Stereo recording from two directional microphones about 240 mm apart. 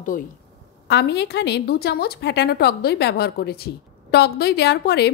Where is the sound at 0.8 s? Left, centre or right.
Left.